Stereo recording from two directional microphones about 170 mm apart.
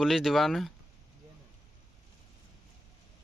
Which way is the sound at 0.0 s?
Centre (ahead or behind).